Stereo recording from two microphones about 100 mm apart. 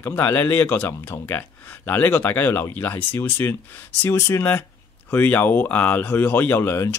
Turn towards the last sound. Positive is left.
turn(degrees=25)  # may be behind; listen again after turning